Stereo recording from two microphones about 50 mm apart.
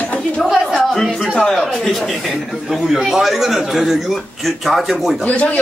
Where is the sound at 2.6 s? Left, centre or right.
Centre.